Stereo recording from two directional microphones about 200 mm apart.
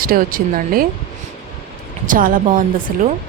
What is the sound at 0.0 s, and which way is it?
Speech, 45° right (ahead or behind).